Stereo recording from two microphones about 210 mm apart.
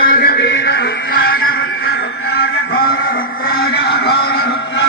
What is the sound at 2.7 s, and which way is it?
Vehicle, 45° left (ahead or behind).